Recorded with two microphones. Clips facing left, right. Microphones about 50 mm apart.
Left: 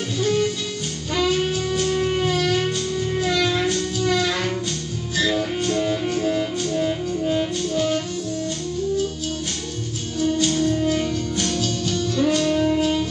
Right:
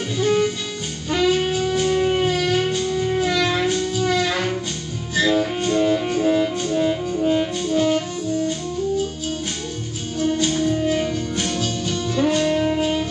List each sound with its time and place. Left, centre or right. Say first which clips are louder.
0.2 s music: right 2 dB; centre
10.1 s music: even; centre